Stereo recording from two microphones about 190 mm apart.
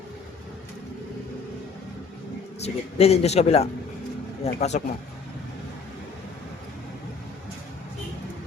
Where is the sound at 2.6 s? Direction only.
35° left (ahead or behind).